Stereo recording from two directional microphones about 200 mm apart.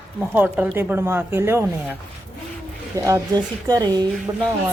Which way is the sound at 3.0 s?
15° right (ahead or behind).